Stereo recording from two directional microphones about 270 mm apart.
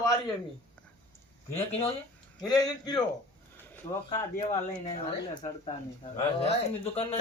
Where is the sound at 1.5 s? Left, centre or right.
Left.